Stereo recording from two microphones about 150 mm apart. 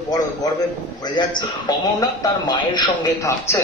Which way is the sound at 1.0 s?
30° left (ahead or behind).